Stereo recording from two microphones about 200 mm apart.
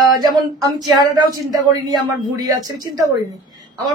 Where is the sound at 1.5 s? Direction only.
20° right (ahead or behind).